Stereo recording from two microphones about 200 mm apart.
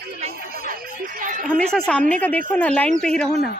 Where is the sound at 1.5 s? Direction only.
5° left (ahead or behind).